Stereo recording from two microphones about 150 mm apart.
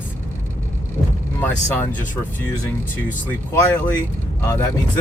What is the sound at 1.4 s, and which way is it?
Speech, 10° left (ahead or behind).